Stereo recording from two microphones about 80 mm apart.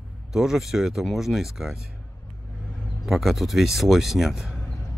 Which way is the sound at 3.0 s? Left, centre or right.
Centre.